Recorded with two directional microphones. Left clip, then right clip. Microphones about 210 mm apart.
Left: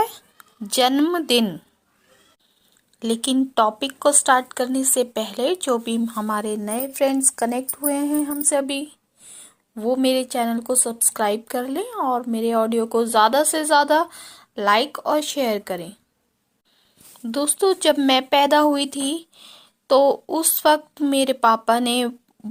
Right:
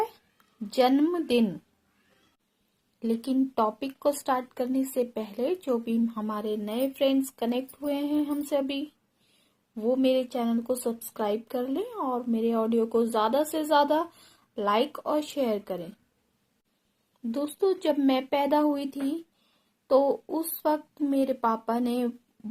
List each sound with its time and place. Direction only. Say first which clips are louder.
0.7 s speech: left 5 dB; 15° left (ahead or behind)
3.0 s a woman's voice: left 6 dB; 20° left (ahead or behind)
17.3 s speech: left 7 dB; 15° left (ahead or behind)
19.9 s a woman's voice: left 7 dB; 20° left (ahead or behind)